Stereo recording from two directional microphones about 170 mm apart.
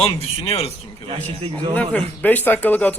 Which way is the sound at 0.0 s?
35° left (ahead or behind).